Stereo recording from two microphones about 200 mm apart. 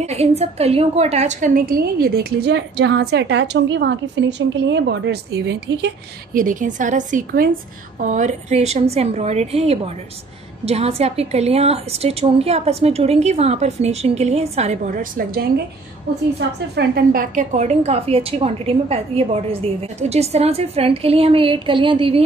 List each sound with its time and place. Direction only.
0.0 s a woman's voice: 30° right (ahead or behind); by 5.9 s 60° right (ahead or behind)
6.3 s a woman's voice: 40° right (ahead or behind)